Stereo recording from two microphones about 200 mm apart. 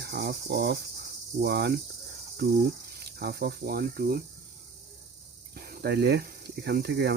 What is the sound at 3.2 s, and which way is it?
Cricket, 55° right (ahead or behind).